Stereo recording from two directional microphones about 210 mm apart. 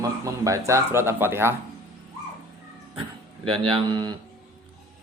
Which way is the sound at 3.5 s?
25° right (ahead or behind).